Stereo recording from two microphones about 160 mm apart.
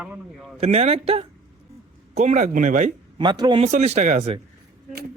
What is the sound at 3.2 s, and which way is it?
Speech, 25° right (ahead or behind).